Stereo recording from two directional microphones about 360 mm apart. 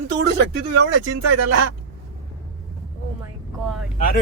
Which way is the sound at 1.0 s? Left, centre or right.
Right.